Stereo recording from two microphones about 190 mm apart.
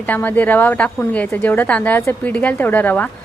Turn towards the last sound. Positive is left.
turn(degrees=10)  # may be behind; listen again after turning